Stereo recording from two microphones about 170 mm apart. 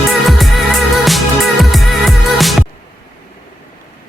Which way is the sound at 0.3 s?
Centre (ahead or behind).